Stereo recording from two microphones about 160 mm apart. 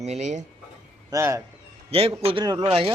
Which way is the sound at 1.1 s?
15° right (ahead or behind).